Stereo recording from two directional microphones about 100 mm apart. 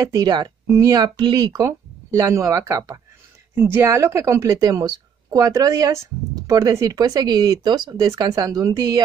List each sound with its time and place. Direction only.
0.0 s a woman's voice: 40° right (ahead or behind)